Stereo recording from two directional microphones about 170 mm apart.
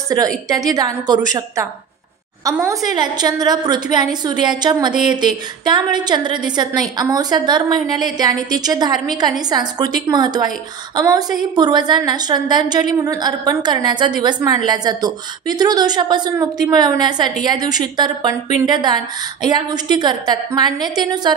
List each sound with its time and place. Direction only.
0.5 s a woman's voice: 20° right (ahead or behind)
2.7 s a woman's voice: 25° right (ahead or behind)